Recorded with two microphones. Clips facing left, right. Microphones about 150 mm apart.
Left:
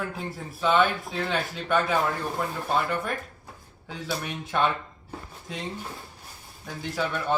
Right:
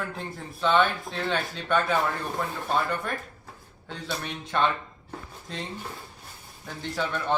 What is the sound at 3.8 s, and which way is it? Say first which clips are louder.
Speech: left 2 dB; 5° left (ahead or behind).